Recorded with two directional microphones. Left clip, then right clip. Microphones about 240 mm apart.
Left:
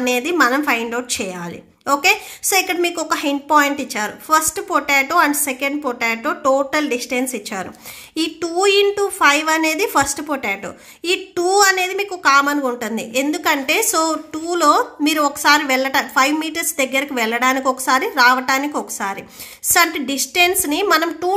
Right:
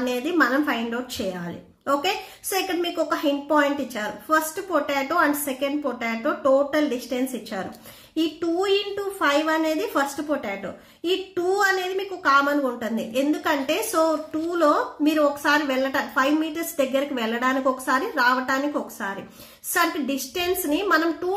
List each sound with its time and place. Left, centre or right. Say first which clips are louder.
0.0 s a woman's voice: left 6 dB; left
8.4 s a woman's voice: left 9 dB; left
20.7 s a woman's voice: left 5 dB; left